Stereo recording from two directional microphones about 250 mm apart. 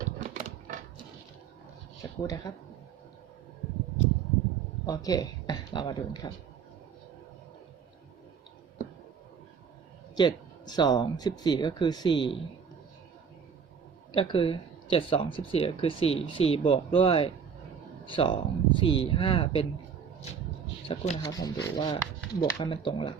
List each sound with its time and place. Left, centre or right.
0.0 s a sound: right
2.2 s speech: centre
4.9 s speech: centre
10.2 s speech: centre
14.1 s speech: left
20.8 s speech: left